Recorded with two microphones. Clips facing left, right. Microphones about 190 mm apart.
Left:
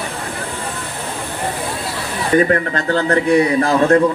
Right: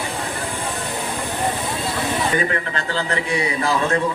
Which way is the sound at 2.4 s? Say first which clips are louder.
Left 8 dB; 45° left (ahead or behind).